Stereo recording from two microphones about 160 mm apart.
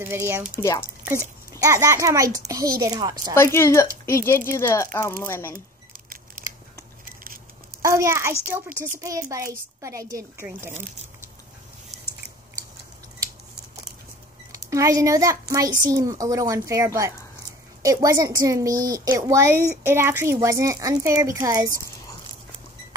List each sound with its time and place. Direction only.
0.0 s speech: 15° right (ahead or behind)
0.6 s speech: 20° left (ahead or behind)
1.0 s a child's voice: 15° right (ahead or behind)
3.3 s speech: 15° left (ahead or behind)
5.9 s scissors: 65° right (ahead or behind)
7.8 s a child's voice: 20° right (ahead or behind)
14.5 s a child's voice: 20° right (ahead or behind)